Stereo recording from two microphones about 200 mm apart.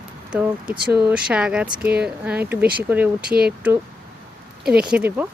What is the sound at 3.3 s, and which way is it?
Speech, 50° right (ahead or behind).